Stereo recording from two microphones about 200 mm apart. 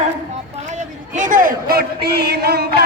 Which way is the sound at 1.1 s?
40° right (ahead or behind).